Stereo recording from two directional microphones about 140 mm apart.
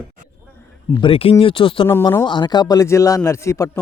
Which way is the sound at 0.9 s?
40° left (ahead or behind).